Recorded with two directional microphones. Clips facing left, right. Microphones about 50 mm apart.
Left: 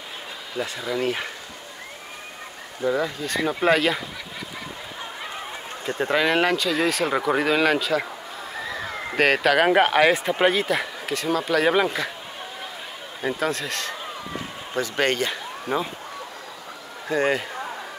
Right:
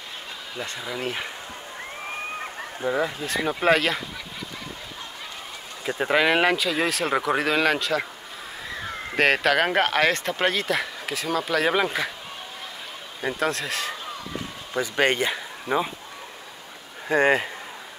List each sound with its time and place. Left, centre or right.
0.6 s speech: centre
2.8 s speech: centre
5.9 s speech: centre
9.1 s speech: centre
13.2 s speech: centre
17.1 s speech: right